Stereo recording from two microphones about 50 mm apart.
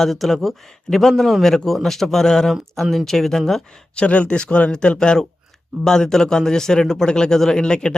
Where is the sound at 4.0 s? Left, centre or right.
Left.